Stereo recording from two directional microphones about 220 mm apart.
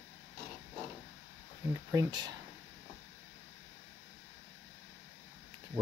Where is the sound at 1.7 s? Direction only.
15° right (ahead or behind).